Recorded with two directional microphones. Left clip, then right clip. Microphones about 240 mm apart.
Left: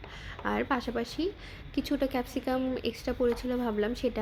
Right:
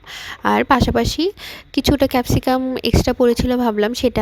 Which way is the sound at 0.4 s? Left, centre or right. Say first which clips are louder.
Right 15 dB; right.